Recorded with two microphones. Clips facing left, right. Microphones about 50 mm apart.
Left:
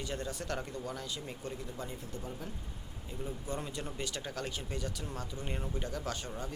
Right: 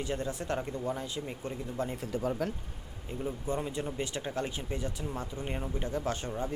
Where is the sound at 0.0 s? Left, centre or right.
Right.